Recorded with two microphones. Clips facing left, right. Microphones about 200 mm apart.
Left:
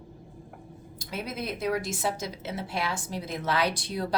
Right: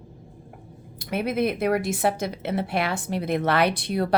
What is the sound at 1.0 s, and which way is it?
A woman's voice, 60° right (ahead or behind).